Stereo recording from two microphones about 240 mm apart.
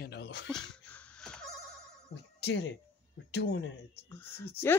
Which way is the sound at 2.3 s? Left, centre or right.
Left.